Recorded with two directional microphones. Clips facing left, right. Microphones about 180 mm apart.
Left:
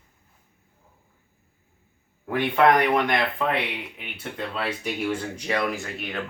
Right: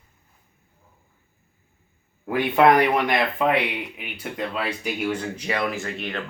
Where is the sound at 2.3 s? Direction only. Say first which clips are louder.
Right 2 dB; 10° right (ahead or behind).